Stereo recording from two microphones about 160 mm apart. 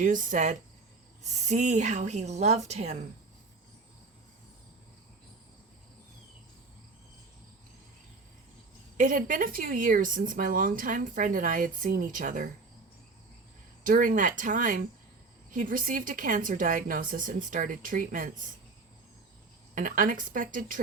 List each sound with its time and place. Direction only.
0.0 s speech: 55° right (ahead or behind)
9.0 s speech: 55° right (ahead or behind)
13.8 s speech: 60° right (ahead or behind)
19.7 s speech: 55° right (ahead or behind)